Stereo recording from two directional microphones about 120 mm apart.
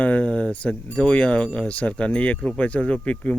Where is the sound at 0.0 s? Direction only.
10° left (ahead or behind).